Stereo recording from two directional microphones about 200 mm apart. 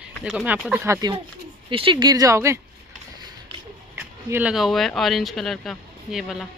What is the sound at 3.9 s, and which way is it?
Speech, 5° right (ahead or behind).